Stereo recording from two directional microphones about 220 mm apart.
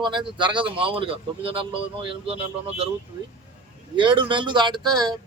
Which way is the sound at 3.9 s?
20° right (ahead or behind).